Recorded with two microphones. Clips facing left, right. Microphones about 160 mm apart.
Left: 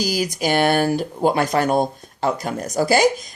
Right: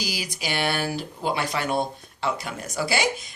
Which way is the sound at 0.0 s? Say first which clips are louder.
Left 10 dB; 45° left (ahead or behind).